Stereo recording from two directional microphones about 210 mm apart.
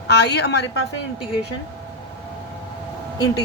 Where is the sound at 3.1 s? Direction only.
20° left (ahead or behind).